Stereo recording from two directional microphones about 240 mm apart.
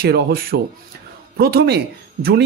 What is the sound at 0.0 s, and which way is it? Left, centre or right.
Speech, right.